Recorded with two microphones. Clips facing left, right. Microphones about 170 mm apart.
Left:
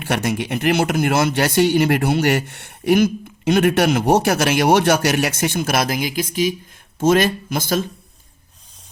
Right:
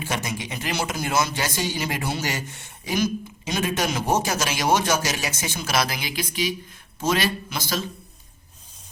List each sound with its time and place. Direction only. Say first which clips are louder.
0.0 s a man's voice: left 8 dB; 60° left (ahead or behind)